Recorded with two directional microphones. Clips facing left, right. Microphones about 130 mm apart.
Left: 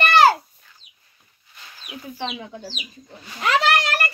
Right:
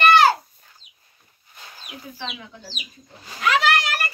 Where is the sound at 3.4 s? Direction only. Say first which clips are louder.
Even; 35° left (ahead or behind).